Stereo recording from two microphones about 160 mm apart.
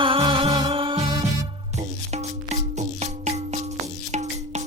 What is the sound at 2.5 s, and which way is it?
Music, 45° right (ahead or behind).